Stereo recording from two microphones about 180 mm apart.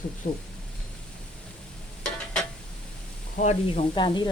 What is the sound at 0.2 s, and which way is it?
Speech, 50° left (ahead or behind).